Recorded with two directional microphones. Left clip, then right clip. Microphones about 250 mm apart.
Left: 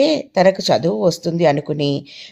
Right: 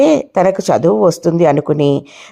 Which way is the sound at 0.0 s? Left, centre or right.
Right.